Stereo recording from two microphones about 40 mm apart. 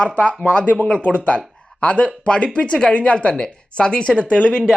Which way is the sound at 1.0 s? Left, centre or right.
Left.